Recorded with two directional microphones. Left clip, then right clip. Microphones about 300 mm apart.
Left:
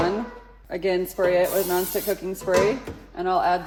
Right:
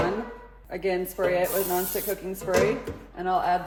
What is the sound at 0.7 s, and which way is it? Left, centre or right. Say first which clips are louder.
Speech: left 3 dB; left.